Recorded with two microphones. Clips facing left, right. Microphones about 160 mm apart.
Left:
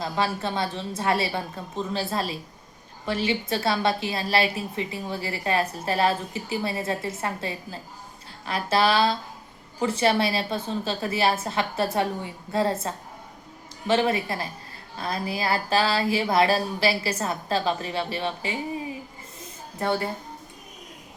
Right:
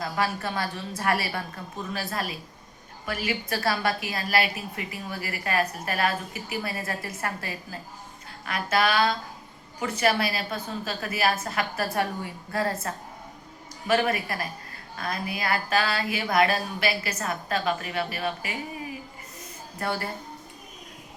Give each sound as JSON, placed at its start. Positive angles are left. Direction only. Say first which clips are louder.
{"t": 0.0, "sound": "a woman's voice", "louder": "left 2 dB", "side_deg": 25}
{"t": 19.8, "sound": "a woman's voice", "louder": "left 4 dB", "side_deg": 20}